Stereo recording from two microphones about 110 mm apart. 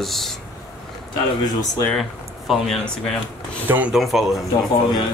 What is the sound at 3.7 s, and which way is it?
Speech, 25° right (ahead or behind).